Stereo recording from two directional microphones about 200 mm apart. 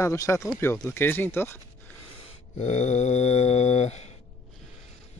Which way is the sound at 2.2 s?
30° left (ahead or behind).